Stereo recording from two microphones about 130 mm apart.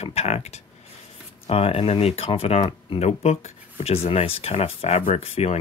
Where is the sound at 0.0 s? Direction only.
55° left (ahead or behind).